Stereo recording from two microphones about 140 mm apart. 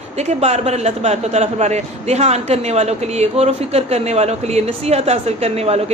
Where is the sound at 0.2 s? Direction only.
50° right (ahead or behind).